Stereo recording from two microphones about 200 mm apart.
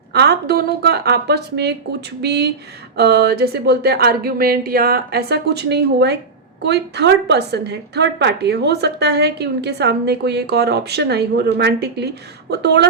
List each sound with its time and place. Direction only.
0.1 s a woman's voice: 55° right (ahead or behind)